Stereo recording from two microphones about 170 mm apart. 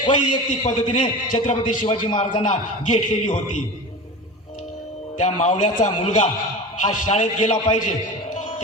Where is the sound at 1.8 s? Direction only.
30° left (ahead or behind).